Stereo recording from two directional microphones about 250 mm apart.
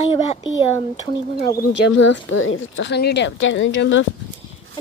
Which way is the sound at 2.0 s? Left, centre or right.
Left.